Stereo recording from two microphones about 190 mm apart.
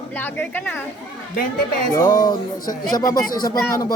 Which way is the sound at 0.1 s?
10° left (ahead or behind).